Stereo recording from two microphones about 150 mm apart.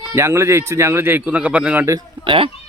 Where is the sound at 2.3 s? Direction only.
35° right (ahead or behind).